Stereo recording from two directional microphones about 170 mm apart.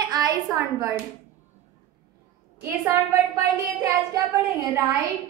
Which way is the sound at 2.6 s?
15° right (ahead or behind).